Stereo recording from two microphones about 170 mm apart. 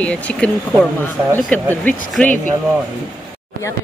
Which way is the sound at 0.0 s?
5° left (ahead or behind).